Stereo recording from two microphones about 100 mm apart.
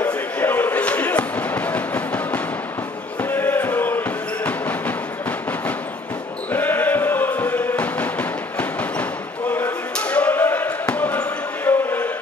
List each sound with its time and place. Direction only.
0.0 s music: 20° left (ahead or behind)
3.2 s chant: 20° left (ahead or behind)
4.5 s music: 15° left (ahead or behind)
6.5 s music: 20° left (ahead or behind)
9.5 s basketball bounce: 15° left (ahead or behind)